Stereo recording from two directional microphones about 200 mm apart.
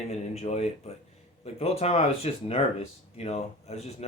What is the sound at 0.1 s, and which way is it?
Speech, 30° left (ahead or behind).